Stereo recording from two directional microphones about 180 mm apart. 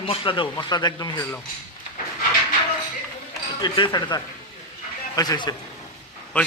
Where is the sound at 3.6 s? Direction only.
25° left (ahead or behind).